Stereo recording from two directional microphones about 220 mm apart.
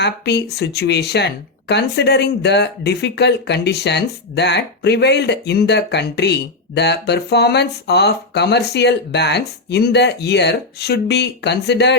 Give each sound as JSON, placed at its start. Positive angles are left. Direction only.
{"t": 0.0, "sound": "speech", "side_deg": 50}